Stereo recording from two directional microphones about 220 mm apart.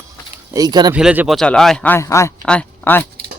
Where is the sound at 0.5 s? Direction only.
20° right (ahead or behind).